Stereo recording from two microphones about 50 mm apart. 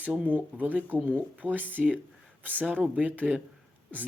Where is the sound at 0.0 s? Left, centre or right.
Right.